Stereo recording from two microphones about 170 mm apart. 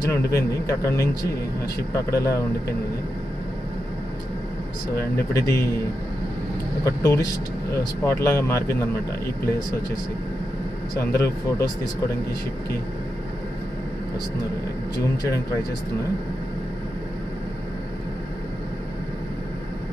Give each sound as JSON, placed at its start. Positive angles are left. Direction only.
{"t": 0.0, "sound": "speech", "side_deg": 20}
{"t": 2.0, "sound": "speech", "side_deg": 20}
{"t": 5.1, "sound": "speech", "side_deg": 15}
{"t": 6.8, "sound": "speech", "side_deg": 15}
{"t": 11.0, "sound": "speech", "side_deg": 20}